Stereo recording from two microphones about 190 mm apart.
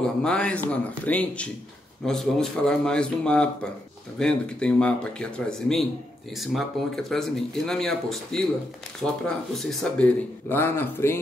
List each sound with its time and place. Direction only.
0.2 s speech: 5° left (ahead or behind)